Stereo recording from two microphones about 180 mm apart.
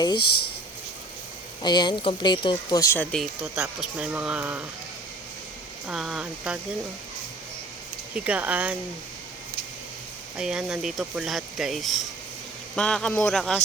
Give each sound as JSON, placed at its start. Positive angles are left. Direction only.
{"t": 0.2, "sound": "speech", "side_deg": 65}
{"t": 1.6, "sound": "speech", "side_deg": 25}
{"t": 5.9, "sound": "speech", "side_deg": -5}
{"t": 8.1, "sound": "speech", "side_deg": -5}
{"t": 10.3, "sound": "speech", "side_deg": -5}